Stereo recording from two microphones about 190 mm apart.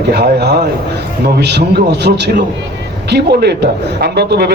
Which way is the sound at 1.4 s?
65° right (ahead or behind).